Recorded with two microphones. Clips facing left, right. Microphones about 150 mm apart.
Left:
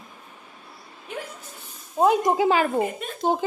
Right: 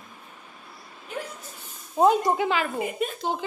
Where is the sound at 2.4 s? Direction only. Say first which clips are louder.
Left 5 dB; 40° left (ahead or behind).